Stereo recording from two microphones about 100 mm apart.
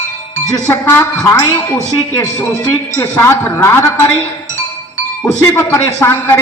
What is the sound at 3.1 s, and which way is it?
A woman's voice, 25° left (ahead or behind).